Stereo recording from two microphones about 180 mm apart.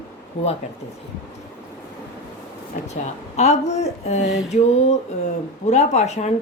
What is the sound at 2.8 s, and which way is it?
A woman's voice, 40° left (ahead or behind).